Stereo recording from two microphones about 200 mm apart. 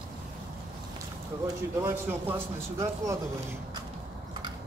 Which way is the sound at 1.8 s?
10° right (ahead or behind).